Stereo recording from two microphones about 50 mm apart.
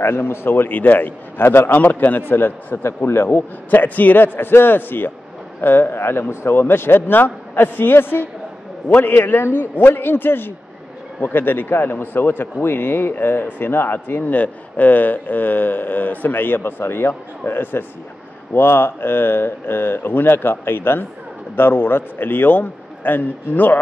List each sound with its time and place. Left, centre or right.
0.0 s a man's voice: left
3.3 s a man's voice: left